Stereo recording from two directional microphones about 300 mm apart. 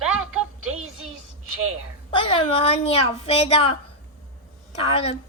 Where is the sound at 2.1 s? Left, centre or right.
Centre.